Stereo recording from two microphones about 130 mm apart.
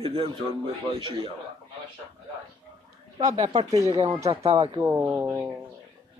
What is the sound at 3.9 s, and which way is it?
Speech, 45° right (ahead or behind).